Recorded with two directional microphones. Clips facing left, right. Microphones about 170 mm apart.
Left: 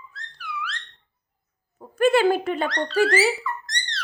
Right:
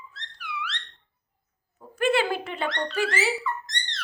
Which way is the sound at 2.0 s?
45° left (ahead or behind).